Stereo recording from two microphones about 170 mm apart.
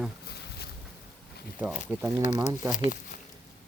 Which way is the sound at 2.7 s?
50° left (ahead or behind).